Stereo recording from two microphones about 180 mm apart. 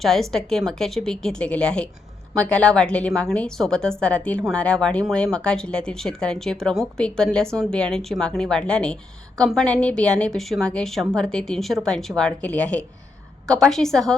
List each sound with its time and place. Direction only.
0.0 s a woman's voice: centre (ahead or behind)